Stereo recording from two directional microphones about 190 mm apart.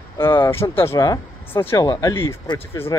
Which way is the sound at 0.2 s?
10° left (ahead or behind).